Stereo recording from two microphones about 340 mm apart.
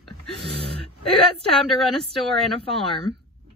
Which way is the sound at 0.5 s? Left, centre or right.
Right.